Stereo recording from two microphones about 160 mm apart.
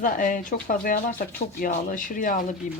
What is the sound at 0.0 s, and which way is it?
A woman's voice, 60° left (ahead or behind).